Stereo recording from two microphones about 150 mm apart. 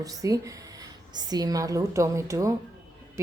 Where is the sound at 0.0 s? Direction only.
25° right (ahead or behind).